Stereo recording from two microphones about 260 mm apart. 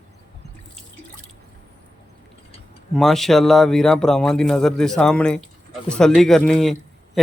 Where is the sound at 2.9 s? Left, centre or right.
Centre.